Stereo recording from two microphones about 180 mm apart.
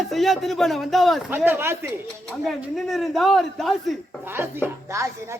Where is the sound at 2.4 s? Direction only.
Centre (ahead or behind).